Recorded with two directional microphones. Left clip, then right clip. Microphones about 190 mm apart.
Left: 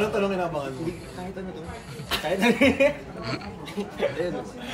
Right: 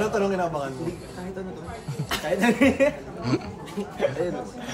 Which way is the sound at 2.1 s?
Centre (ahead or behind).